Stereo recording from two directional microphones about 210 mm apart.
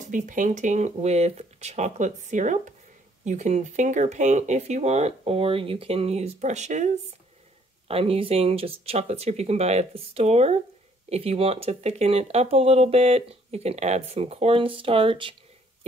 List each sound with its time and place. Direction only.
0.0 s speech: 40° right (ahead or behind)
7.9 s speech: 25° right (ahead or behind)